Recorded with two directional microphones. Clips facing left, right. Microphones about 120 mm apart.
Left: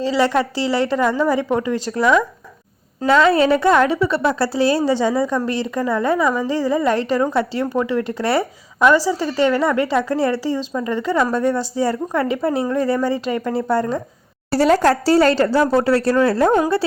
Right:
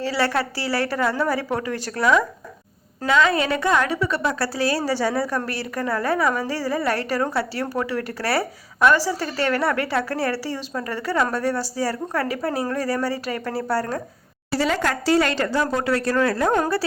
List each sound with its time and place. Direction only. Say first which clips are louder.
0.0 s a woman's voice: left 5 dB; 15° left (ahead or behind)
3.1 s a woman's voice: left 6 dB; 30° left (ahead or behind)
14.5 s a woman's voice: left 8 dB; 40° left (ahead or behind)